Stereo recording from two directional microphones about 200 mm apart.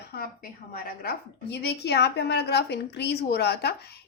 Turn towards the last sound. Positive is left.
turn(degrees=55)  # may be behind; listen again after turning